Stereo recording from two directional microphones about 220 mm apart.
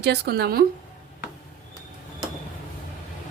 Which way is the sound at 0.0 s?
50° right (ahead or behind).